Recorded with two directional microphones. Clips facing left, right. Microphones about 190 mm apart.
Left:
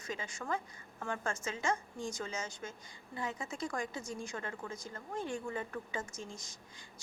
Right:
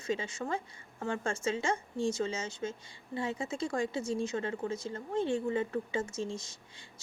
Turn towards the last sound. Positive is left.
turn(degrees=-25)  # may be behind; listen again after turning